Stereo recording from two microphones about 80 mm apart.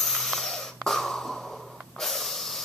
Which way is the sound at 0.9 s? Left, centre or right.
Centre.